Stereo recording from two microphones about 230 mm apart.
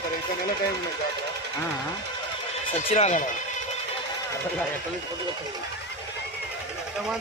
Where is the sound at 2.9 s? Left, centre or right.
Left.